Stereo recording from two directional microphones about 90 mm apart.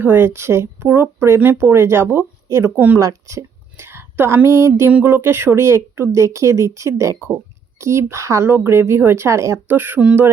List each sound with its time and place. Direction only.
0.0 s speech: 25° right (ahead or behind)
3.0 s a sound: 35° right (ahead or behind)
4.4 s speech: 30° right (ahead or behind)
9.6 s speech: 20° right (ahead or behind)